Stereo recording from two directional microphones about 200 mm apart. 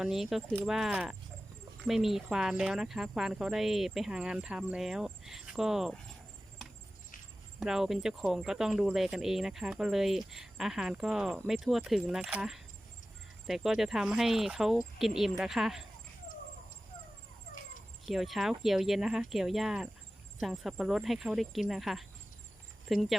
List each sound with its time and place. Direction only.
0.0 s speech: centre (ahead or behind)
7.6 s speech: centre (ahead or behind)
18.0 s speech: centre (ahead or behind)